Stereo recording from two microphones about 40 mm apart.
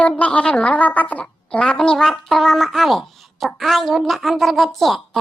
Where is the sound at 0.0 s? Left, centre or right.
Left.